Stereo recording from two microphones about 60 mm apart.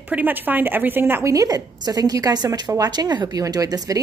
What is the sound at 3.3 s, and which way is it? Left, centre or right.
Speech, right.